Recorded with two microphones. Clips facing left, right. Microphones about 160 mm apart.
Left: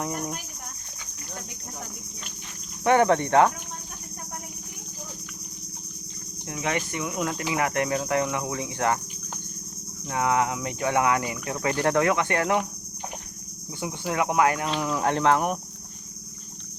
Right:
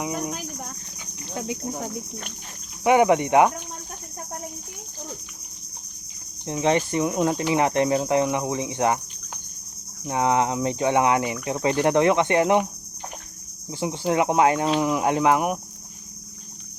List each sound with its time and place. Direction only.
0.0 s speech: 5° right (ahead or behind)
1.5 s speech: 90° right
2.8 s cricket: 15° right (ahead or behind)
6.4 s speech: 30° right (ahead or behind)
10.1 s speech: 25° right (ahead or behind)
13.7 s speech: 25° right (ahead or behind)
14.8 s cricket: 15° right (ahead or behind)